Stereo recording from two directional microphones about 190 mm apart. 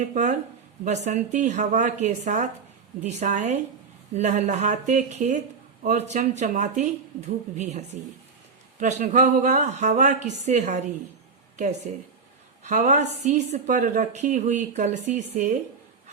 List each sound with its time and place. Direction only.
0.0 s a woman's voice: 40° right (ahead or behind)
12.6 s a woman's voice: 40° right (ahead or behind)